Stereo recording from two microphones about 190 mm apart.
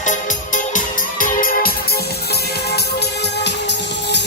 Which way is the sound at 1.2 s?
50° left (ahead or behind).